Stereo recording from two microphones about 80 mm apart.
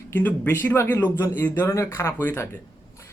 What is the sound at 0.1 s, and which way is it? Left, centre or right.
A man's voice, left.